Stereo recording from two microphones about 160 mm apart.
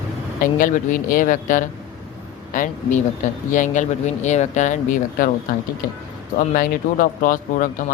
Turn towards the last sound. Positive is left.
turn(degrees=60)  # may be behind; listen again after turning